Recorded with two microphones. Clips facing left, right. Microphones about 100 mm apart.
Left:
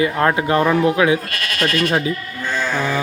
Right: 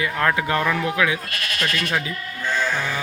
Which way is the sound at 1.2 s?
60° left (ahead or behind).